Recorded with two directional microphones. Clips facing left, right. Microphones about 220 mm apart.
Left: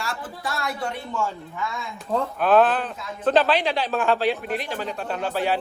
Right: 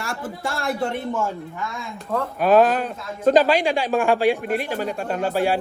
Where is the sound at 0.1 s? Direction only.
25° right (ahead or behind).